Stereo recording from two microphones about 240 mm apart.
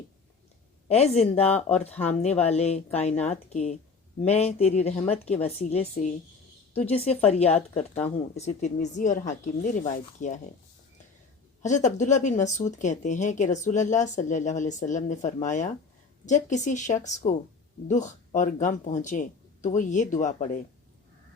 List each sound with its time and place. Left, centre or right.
0.9 s speech: left
1.9 s speech: centre
2.5 s speech: left
11.6 s speech: left